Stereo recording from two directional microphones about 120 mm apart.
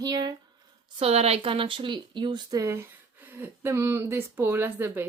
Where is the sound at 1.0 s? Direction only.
60° right (ahead or behind); by 2.7 s 35° right (ahead or behind).